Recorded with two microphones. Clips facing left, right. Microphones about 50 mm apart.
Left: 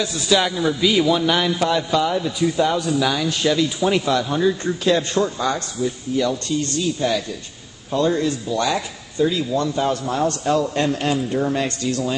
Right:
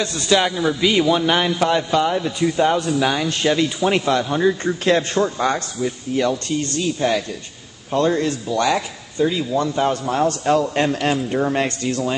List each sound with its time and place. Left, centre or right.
0.3 s a man's voice: centre; by 8.8 s right
9.2 s speech: centre
9.8 s a man's voice: right